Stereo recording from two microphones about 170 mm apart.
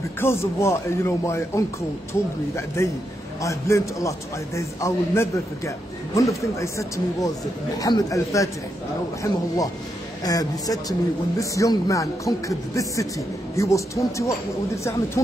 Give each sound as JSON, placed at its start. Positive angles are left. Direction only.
{"t": 0.2, "sound": "speech", "side_deg": 15}
{"t": 10.2, "sound": "speech", "side_deg": 20}